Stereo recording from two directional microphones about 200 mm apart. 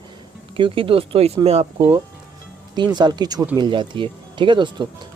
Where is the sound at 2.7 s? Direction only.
20° right (ahead or behind).